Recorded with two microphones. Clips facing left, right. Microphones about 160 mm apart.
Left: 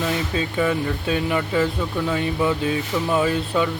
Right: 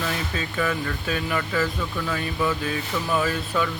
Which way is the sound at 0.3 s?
25° left (ahead or behind).